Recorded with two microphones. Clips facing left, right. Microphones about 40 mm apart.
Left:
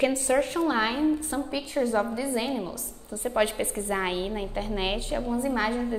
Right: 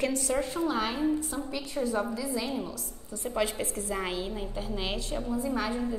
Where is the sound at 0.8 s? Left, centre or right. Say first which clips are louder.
Left 4 dB; left.